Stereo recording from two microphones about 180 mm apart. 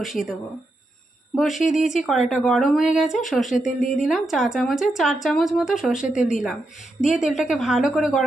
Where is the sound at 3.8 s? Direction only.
45° left (ahead or behind).